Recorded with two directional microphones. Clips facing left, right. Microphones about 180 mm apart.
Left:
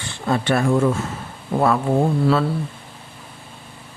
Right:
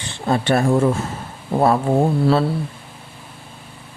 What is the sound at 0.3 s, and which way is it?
Speech, 35° right (ahead or behind).